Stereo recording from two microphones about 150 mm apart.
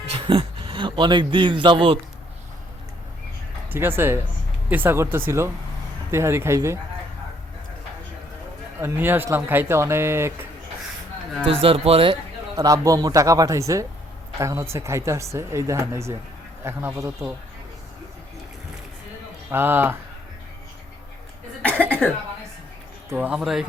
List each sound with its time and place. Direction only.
0.0 s a man's voice: 40° right (ahead or behind)
3.7 s speech: 15° right (ahead or behind)
8.8 s speech: 15° right (ahead or behind)
11.4 s speech: 40° right (ahead or behind)
12.5 s speech: 25° right (ahead or behind)
19.5 s speech: 15° right (ahead or behind)
21.6 s cough: 10° left (ahead or behind)
23.0 s speech: 10° right (ahead or behind)